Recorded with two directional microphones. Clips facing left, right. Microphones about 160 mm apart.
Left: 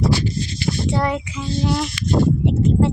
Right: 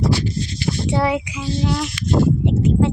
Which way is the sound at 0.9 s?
5° right (ahead or behind).